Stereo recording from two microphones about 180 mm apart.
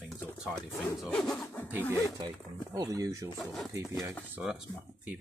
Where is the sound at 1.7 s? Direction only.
10° right (ahead or behind).